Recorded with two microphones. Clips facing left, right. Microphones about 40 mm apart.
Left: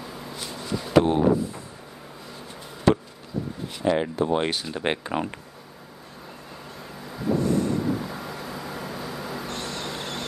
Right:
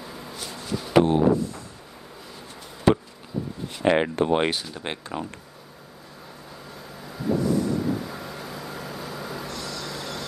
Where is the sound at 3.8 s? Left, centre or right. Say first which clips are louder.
Right 3 dB; right.